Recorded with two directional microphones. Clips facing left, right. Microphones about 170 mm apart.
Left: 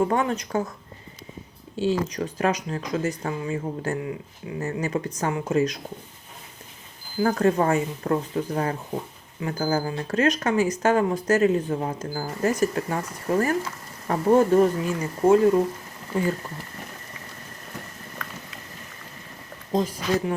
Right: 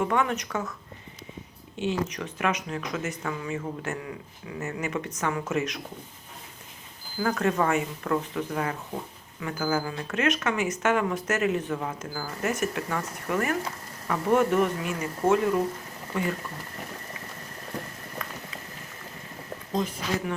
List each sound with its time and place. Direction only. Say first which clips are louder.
0.0 s speech: left 3 dB; 35° left (ahead or behind)
1.7 s speech: left 4 dB; 35° left (ahead or behind)
7.2 s speech: left 4 dB; 35° left (ahead or behind)
19.7 s speech: left 5 dB; 30° left (ahead or behind)